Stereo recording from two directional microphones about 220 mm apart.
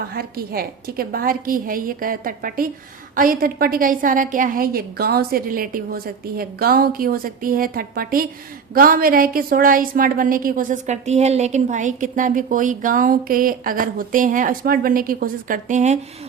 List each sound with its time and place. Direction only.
0.1 s a woman's voice: 45° right (ahead or behind)